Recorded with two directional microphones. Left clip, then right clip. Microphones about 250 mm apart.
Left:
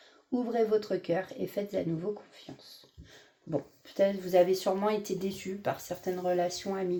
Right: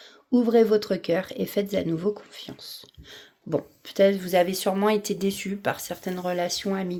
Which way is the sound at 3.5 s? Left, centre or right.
Right.